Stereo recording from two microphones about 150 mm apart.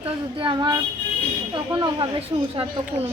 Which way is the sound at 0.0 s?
35° right (ahead or behind).